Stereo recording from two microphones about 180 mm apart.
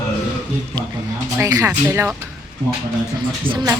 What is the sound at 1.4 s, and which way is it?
Speech, 20° right (ahead or behind).